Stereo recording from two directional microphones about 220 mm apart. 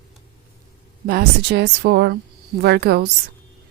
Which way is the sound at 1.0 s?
45° right (ahead or behind).